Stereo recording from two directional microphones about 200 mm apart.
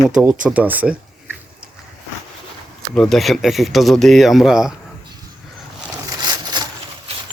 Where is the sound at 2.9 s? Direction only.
Centre (ahead or behind).